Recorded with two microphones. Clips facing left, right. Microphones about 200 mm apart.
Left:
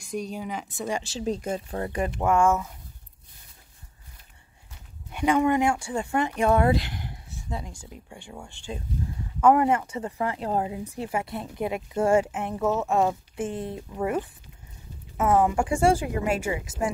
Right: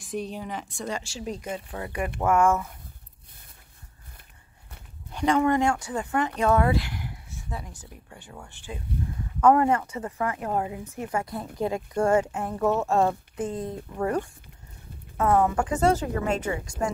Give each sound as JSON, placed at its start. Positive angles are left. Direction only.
{"t": 0.0, "sound": "a woman's voice", "side_deg": 0}
{"t": 0.9, "sound": "speech", "side_deg": 20}
{"t": 5.1, "sound": "speech", "side_deg": 10}
{"t": 11.9, "sound": "speech", "side_deg": 10}
{"t": 12.3, "sound": "speech", "side_deg": 20}
{"t": 12.5, "sound": "a woman's voice", "side_deg": 0}
{"t": 13.4, "sound": "speech", "side_deg": 25}
{"t": 13.7, "sound": "speech", "side_deg": 10}
{"t": 15.1, "sound": "speech", "side_deg": 20}
{"t": 15.7, "sound": "speech", "side_deg": 10}